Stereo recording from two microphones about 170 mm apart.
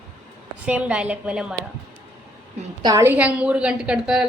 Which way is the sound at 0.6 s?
5° right (ahead or behind).